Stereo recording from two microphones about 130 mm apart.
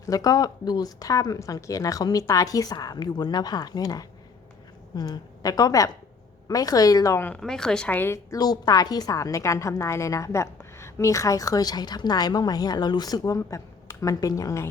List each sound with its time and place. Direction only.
0.0 s a woman's voice: 25° left (ahead or behind)
7.3 s a woman's voice: 5° left (ahead or behind); by 14.7 s 25° left (ahead or behind)